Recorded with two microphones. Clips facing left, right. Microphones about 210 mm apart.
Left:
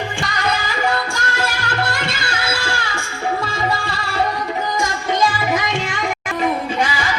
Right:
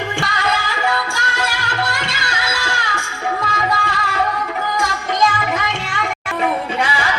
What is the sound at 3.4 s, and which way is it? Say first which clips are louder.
Music: even; 30° left (ahead or behind).